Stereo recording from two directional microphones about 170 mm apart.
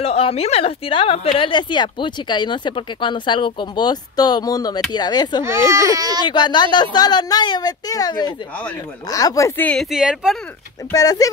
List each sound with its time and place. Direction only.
0.0 s a woman's voice: 35° left (ahead or behind)
5.4 s speech: 15° right (ahead or behind)
6.2 s a woman's voice: 25° left (ahead or behind)
9.7 s speech: centre (ahead or behind)
10.9 s a woman's voice: 20° left (ahead or behind)